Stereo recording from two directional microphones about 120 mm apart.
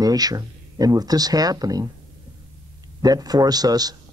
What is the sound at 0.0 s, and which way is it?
Speech, 30° right (ahead or behind).